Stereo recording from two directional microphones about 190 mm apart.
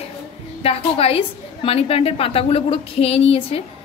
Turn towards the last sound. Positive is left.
turn(degrees=30)  # may be behind; listen again after turning